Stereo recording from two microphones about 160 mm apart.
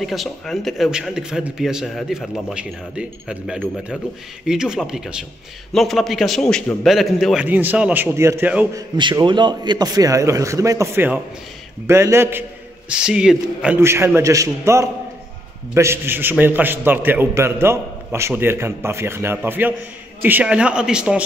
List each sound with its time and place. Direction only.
0.0 s a man's voice: centre (ahead or behind)
7.4 s a man's voice: 10° right (ahead or behind)
8.7 s a man's voice: 25° right (ahead or behind); by 21.2 s 5° right (ahead or behind)